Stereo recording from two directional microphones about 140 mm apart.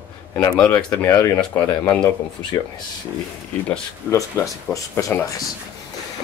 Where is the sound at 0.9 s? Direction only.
15° left (ahead or behind).